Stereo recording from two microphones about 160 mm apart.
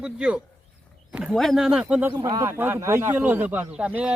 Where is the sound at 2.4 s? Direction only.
15° right (ahead or behind).